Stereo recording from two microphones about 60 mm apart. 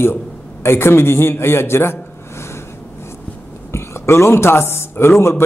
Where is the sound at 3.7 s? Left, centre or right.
Left.